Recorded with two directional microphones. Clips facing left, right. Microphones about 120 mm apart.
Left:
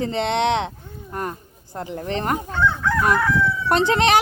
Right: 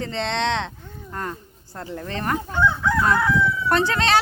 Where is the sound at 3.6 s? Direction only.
20° left (ahead or behind).